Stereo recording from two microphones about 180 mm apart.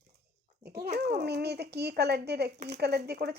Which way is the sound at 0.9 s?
65° right (ahead or behind).